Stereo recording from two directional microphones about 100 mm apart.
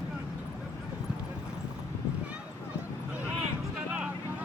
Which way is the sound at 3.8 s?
10° right (ahead or behind).